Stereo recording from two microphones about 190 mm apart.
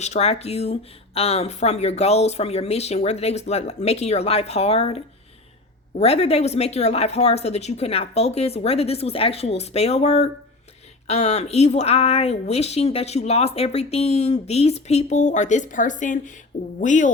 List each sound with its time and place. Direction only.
0.0 s a woman's voice: 35° left (ahead or behind)